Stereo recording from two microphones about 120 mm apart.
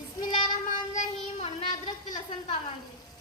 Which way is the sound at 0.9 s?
90° left.